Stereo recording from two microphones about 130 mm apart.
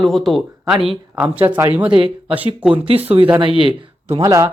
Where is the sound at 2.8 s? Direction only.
50° right (ahead or behind).